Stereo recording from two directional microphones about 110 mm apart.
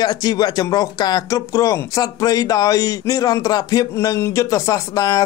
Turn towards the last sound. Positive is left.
turn(degrees=35)  # may be behind; listen again after turning